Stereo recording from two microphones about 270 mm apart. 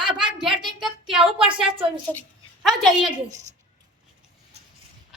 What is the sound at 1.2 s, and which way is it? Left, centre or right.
Speech, centre.